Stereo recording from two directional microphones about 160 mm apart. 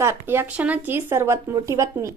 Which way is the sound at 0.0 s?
15° right (ahead or behind).